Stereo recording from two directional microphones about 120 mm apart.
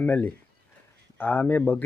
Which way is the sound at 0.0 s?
10° left (ahead or behind).